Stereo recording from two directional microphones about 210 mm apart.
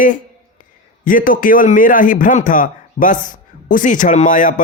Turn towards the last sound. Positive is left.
turn(degrees=40)  # may be behind; listen again after turning